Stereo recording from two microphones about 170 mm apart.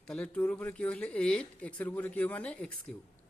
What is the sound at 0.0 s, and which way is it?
A man's voice, 5° left (ahead or behind).